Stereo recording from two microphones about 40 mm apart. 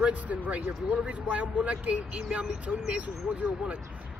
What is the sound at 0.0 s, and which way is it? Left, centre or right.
Speech, right.